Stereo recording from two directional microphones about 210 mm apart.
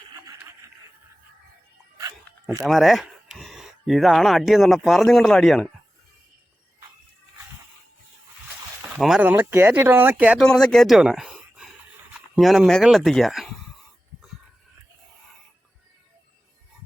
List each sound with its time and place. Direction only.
2.0 s dog: 15° right (ahead or behind)
2.6 s speech: centre (ahead or behind)
8.9 s speech: centre (ahead or behind)